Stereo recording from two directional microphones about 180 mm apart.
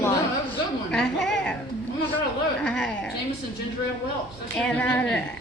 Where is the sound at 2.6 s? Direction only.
5° left (ahead or behind).